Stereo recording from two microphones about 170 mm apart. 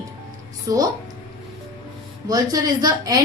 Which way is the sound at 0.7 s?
20° right (ahead or behind).